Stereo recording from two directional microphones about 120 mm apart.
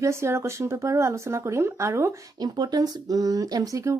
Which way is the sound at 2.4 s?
35° right (ahead or behind).